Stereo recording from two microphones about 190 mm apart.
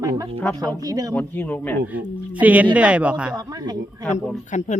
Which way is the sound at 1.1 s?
10° left (ahead or behind).